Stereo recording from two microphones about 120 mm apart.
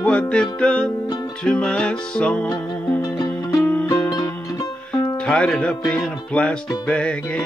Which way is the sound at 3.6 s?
20° left (ahead or behind).